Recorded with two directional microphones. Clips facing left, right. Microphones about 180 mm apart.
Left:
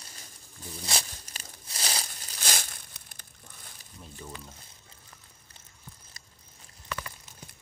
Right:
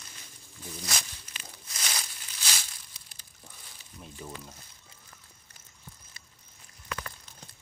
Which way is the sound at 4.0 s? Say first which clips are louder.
Right 1 dB; 5° right (ahead or behind).